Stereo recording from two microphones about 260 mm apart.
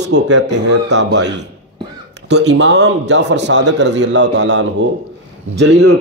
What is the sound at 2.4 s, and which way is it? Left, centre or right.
A man's voice, right.